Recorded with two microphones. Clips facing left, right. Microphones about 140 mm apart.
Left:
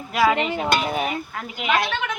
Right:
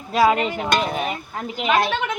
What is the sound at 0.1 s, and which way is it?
Music, 25° right (ahead or behind).